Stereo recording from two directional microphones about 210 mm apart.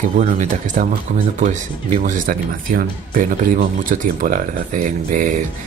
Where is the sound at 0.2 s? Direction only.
35° right (ahead or behind).